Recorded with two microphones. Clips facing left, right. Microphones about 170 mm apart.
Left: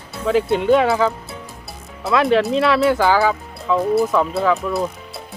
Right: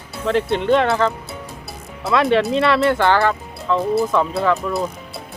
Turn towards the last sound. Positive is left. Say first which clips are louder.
# left 1 dB
turn(degrees=0)  # may be behind; listen again after turning